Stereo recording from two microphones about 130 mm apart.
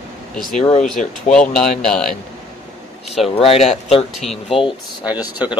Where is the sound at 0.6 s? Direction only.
65° left (ahead or behind).